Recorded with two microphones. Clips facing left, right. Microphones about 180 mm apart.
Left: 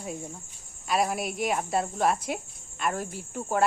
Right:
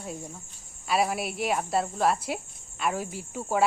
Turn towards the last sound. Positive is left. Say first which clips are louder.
# even
turn(degrees=-5)  # may be behind; listen again after turning